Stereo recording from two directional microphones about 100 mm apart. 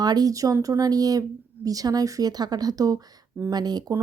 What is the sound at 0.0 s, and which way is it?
A woman's voice, 40° right (ahead or behind).